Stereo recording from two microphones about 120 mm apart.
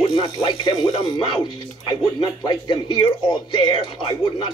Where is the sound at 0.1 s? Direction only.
40° left (ahead or behind).